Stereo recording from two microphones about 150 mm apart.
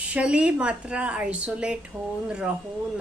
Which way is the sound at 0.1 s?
5° right (ahead or behind).